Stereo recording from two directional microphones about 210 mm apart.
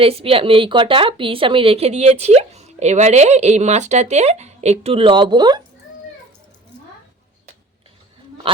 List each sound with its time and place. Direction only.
0.0 s speech: 25° right (ahead or behind)